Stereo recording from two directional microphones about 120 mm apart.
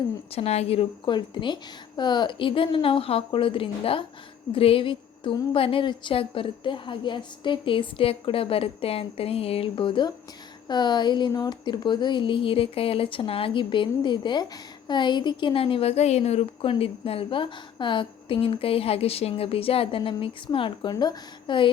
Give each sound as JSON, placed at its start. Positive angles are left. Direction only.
{"t": 0.3, "sound": "a woman's voice", "side_deg": 60}
{"t": 1.0, "sound": "a woman's voice", "side_deg": 40}
{"t": 20.9, "sound": "speech", "side_deg": 35}